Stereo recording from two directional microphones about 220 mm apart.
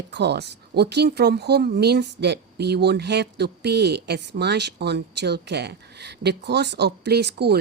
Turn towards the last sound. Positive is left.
turn(degrees=-50)  # may be behind; listen again after turning